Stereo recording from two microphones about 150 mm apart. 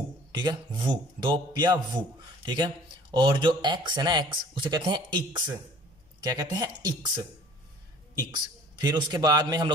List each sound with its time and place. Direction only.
0.3 s a man's voice: 30° right (ahead or behind)
8.7 s a man's voice: 30° right (ahead or behind)